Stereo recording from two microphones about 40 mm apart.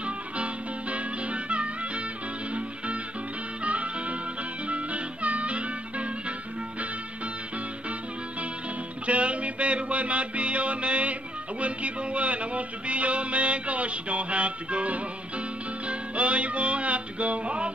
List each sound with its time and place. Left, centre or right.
0.0 s music: right
3.6 s music: right
9.0 s music: right